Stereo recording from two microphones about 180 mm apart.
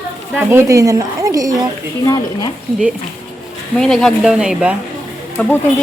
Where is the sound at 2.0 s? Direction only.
20° left (ahead or behind).